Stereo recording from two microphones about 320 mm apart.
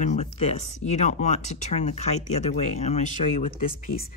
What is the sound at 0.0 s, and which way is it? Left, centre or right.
Speech, left.